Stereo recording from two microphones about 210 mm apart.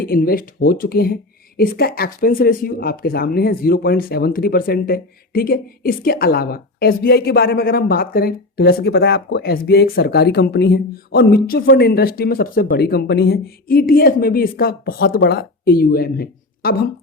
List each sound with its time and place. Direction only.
0.0 s speech: 45° left (ahead or behind)